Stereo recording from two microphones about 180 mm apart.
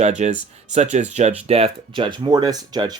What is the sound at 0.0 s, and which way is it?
Speech, 40° right (ahead or behind).